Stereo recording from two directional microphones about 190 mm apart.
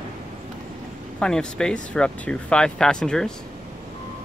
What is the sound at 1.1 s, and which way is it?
Speech, 5° left (ahead or behind).